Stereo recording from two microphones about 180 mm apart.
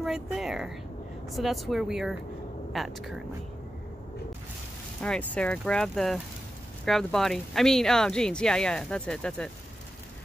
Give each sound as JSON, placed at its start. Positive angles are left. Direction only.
{"t": 0.0, "sound": "speech", "side_deg": 0}
{"t": 5.0, "sound": "speech", "side_deg": 5}